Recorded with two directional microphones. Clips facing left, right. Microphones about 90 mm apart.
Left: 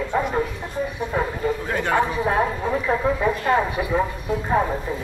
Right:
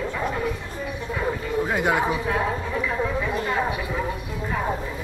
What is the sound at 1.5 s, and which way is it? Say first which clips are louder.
Speech: right 1 dB; 15° right (ahead or behind).